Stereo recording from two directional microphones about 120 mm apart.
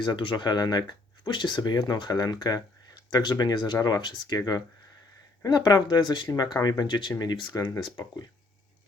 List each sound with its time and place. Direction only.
0.0 s speech: 40° left (ahead or behind)